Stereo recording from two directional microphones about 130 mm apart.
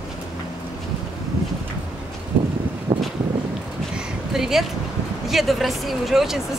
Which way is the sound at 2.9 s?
25° right (ahead or behind).